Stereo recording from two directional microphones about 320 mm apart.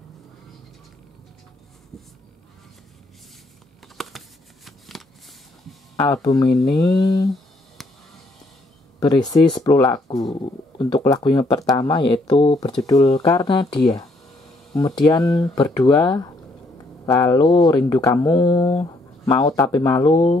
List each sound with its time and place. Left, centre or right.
4.0 s a sound: centre
4.6 s shuffling cards: centre
5.7 s speech: centre
9.0 s speech: centre
14.7 s speech: centre